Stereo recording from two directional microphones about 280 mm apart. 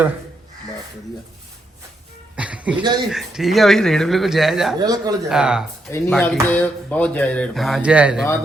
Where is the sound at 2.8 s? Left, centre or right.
Centre.